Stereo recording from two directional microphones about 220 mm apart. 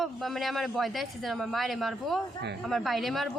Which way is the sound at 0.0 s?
Centre (ahead or behind).